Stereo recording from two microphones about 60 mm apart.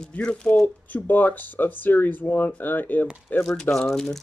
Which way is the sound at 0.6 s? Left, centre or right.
Left.